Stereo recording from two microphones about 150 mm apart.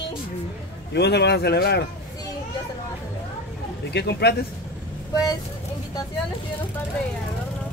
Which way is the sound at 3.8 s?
90° left.